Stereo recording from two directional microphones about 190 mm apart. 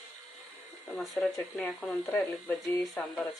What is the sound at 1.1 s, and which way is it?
Speech, 10° left (ahead or behind).